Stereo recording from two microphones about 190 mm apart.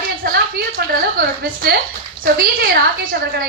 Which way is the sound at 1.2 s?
50° right (ahead or behind).